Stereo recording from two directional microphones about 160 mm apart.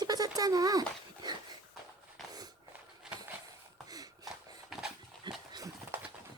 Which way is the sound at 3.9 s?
25° right (ahead or behind).